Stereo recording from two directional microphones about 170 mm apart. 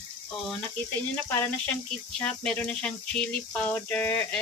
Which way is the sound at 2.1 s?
5° left (ahead or behind).